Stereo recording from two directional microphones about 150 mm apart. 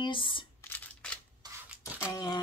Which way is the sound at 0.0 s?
35° left (ahead or behind).